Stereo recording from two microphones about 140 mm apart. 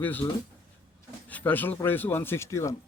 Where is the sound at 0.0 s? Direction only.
10° left (ahead or behind).